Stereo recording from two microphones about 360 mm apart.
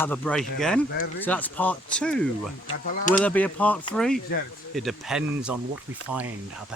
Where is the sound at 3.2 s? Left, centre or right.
Centre.